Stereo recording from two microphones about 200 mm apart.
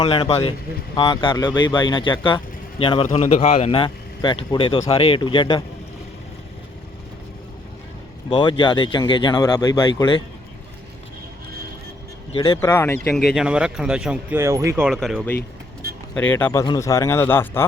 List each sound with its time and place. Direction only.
0.0 s speech: 25° left (ahead or behind)
8.3 s speech: 25° left (ahead or behind)
12.3 s speech: 25° left (ahead or behind)
12.5 s a man's voice: 10° left (ahead or behind)
13.2 s speech: 5° right (ahead or behind)
14.8 s a man's voice: centre (ahead or behind)